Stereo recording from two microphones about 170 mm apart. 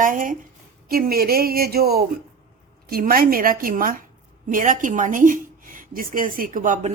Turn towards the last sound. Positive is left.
turn(degrees=-50)  # may be behind; listen again after turning